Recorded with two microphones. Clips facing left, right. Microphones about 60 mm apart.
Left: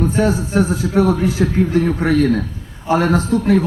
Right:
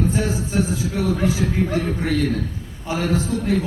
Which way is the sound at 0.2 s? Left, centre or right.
Left.